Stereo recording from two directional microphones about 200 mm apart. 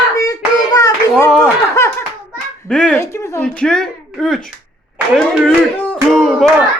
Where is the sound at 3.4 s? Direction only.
5° left (ahead or behind).